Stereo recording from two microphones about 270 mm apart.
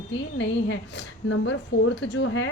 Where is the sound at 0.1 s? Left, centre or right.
Left.